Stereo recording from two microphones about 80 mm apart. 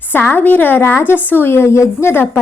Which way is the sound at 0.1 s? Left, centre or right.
Left.